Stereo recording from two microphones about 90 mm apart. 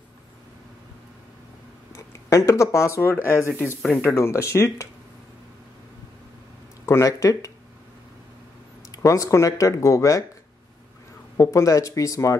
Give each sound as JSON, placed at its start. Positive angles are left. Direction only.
{"t": 2.0, "sound": "speech", "side_deg": 35}
{"t": 6.9, "sound": "speech", "side_deg": 35}
{"t": 8.9, "sound": "speech", "side_deg": 35}
{"t": 11.3, "sound": "speech", "side_deg": 35}